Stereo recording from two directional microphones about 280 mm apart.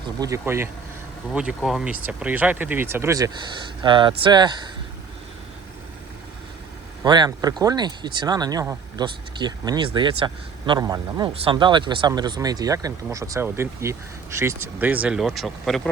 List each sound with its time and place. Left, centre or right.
0.2 s speech: centre
7.0 s speech: centre